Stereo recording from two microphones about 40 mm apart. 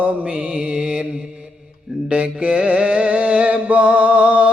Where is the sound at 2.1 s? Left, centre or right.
Right.